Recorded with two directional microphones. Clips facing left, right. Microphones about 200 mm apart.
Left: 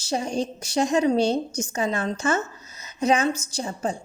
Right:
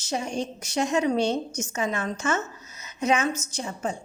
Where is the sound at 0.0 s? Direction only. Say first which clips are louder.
Left 3 dB; 35° left (ahead or behind).